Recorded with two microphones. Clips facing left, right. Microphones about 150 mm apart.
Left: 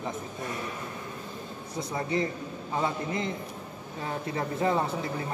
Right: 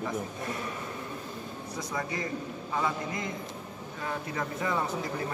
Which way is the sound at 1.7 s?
25° left (ahead or behind).